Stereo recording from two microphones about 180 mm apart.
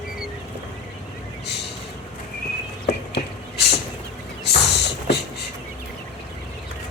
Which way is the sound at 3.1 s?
65° left (ahead or behind).